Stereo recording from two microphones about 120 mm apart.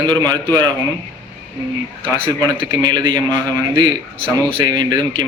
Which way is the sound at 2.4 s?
40° right (ahead or behind).